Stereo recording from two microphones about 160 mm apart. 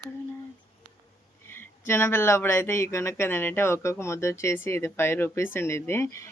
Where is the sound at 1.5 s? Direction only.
15° left (ahead or behind).